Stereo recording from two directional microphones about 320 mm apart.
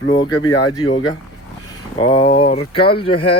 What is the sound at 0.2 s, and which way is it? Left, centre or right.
Speech, centre.